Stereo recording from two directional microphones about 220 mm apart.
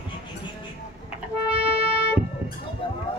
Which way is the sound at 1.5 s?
5° right (ahead or behind).